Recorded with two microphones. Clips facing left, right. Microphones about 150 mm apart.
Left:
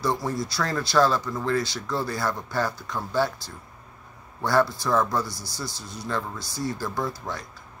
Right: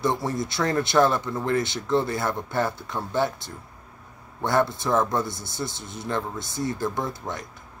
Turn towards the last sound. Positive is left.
turn(degrees=-20)  # may be behind; listen again after turning